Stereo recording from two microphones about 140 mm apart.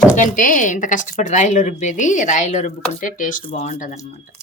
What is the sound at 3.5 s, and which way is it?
Speech, 55° left (ahead or behind).